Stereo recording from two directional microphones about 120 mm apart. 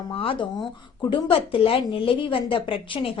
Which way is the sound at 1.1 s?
50° left (ahead or behind).